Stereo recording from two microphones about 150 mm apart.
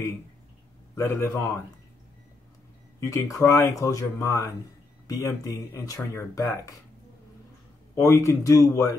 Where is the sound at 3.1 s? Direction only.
20° left (ahead or behind).